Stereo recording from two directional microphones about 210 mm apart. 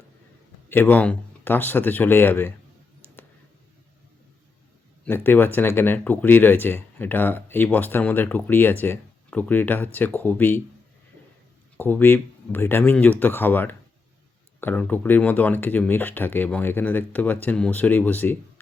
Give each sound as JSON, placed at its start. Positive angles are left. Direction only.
{"t": 0.7, "sound": "speech", "side_deg": 10}
{"t": 5.0, "sound": "speech", "side_deg": 10}
{"t": 11.8, "sound": "speech", "side_deg": 10}